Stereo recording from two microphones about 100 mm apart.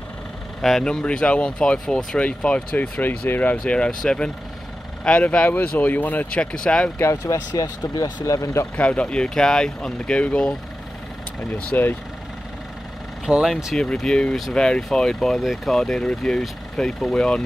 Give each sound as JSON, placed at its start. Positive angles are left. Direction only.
{"t": 0.6, "sound": "speech", "side_deg": 5}
{"t": 7.0, "sound": "speech", "side_deg": 30}
{"t": 8.7, "sound": "speech", "side_deg": 10}
{"t": 11.5, "sound": "speech", "side_deg": 15}
{"t": 13.2, "sound": "speech", "side_deg": -5}
{"t": 13.7, "sound": "speech", "side_deg": 5}